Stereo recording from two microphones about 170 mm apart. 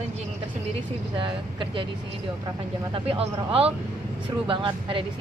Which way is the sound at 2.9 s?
35° right (ahead or behind).